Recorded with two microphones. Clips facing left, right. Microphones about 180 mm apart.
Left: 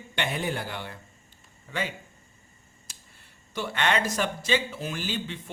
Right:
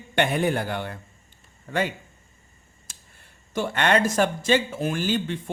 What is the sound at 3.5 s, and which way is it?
A man's voice, 50° right (ahead or behind).